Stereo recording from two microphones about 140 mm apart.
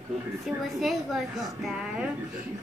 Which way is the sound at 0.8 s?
Centre (ahead or behind).